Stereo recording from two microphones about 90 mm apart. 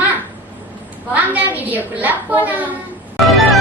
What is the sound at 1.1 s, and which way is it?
A woman's voice, 20° right (ahead or behind).